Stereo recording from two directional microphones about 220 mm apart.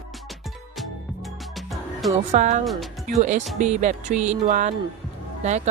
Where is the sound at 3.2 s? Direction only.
35° right (ahead or behind).